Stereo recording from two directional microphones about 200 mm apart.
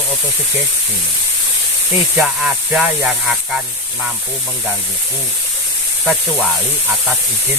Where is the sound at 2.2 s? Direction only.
5° right (ahead or behind).